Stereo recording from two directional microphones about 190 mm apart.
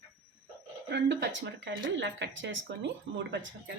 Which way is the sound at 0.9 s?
65° right (ahead or behind).